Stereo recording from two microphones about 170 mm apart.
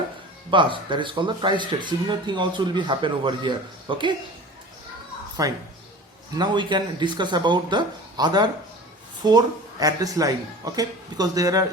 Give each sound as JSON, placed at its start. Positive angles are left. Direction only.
{"t": 0.5, "sound": "speech", "side_deg": -30}
{"t": 5.4, "sound": "speech", "side_deg": -20}